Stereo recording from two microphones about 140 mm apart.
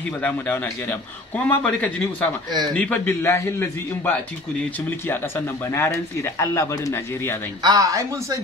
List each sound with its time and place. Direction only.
0.2 s a man's voice: 10° left (ahead or behind)
5.7 s speech: 20° left (ahead or behind)
7.6 s speech: 25° right (ahead or behind)